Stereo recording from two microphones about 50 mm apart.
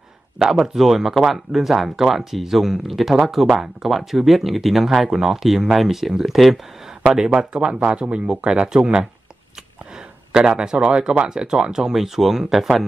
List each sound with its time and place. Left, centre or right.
0.4 s speech: centre
7.3 s speech: centre